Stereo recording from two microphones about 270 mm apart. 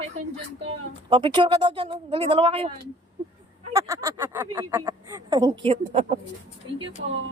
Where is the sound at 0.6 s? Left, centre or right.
Centre.